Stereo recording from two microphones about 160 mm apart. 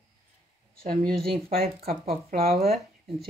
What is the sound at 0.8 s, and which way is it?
Speech, 65° right (ahead or behind).